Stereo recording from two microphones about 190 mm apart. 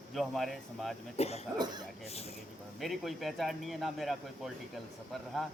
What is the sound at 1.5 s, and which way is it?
Speech, 20° right (ahead or behind).